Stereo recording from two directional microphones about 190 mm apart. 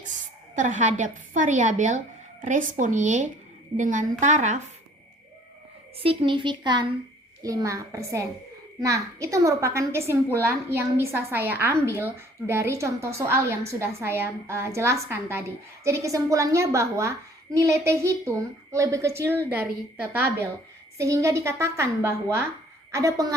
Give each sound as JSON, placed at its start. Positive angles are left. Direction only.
{"t": 0.5, "sound": "a woman's voice", "side_deg": -40}
{"t": 6.0, "sound": "a woman's voice", "side_deg": -25}